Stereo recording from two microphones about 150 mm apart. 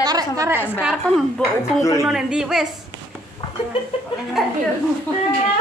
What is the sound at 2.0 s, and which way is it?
Speech, 5° right (ahead or behind).